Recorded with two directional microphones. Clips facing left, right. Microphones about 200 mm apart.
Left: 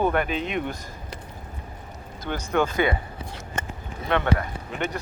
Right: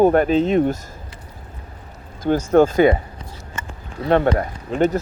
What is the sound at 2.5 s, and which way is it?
Speech, 45° right (ahead or behind).